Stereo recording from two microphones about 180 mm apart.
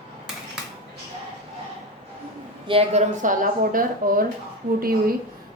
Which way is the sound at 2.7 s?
30° right (ahead or behind).